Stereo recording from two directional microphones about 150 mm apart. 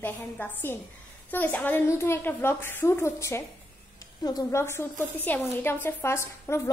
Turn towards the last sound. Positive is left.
turn(degrees=15)  # may be behind; listen again after turning